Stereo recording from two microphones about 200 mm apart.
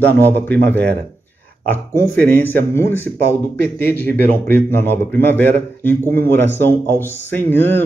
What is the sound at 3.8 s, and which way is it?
Speech, 10° left (ahead or behind).